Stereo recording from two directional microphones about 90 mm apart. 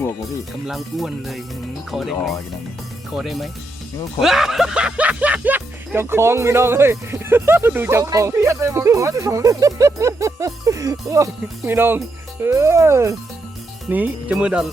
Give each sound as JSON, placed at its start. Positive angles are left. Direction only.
{"t": 0.7, "sound": "speech", "side_deg": 0}
{"t": 13.9, "sound": "speech", "side_deg": -15}